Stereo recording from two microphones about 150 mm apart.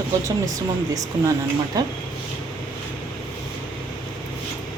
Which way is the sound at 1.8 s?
25° right (ahead or behind).